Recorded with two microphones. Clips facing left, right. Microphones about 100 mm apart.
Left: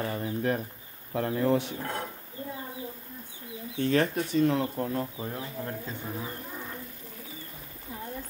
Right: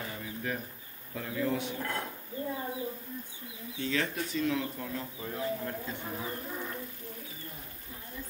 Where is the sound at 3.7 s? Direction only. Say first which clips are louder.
Left 7 dB; 50° left (ahead or behind).